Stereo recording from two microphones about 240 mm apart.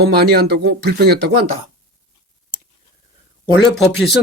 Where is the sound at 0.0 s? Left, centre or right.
Right.